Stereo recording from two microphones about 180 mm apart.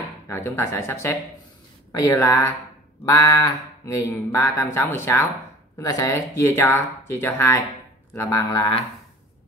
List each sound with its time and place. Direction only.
0.3 s speech: 15° left (ahead or behind)